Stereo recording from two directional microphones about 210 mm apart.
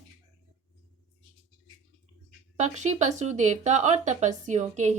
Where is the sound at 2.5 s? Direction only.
35° right (ahead or behind).